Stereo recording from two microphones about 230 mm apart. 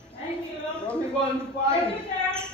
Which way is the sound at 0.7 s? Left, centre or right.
Centre.